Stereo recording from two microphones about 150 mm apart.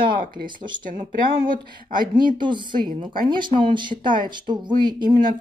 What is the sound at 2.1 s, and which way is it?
Speech, 30° right (ahead or behind).